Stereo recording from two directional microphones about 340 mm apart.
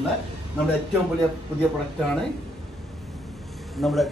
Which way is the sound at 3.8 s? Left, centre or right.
Centre.